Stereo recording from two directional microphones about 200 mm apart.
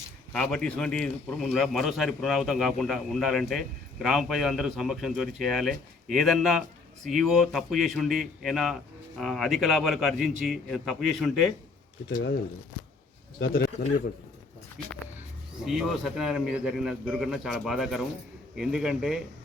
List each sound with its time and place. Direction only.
0.3 s speech: 5° left (ahead or behind)
12.1 s speech: 50° left (ahead or behind)
13.4 s speech: 50° left (ahead or behind)
15.6 s speech: centre (ahead or behind)